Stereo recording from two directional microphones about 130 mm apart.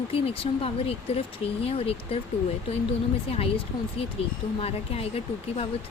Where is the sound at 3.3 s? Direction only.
50° left (ahead or behind).